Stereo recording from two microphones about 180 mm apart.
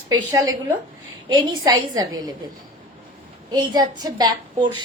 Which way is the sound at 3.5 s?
20° right (ahead or behind).